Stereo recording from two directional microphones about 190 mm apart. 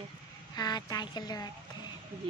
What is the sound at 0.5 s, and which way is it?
Speech, 20° left (ahead or behind).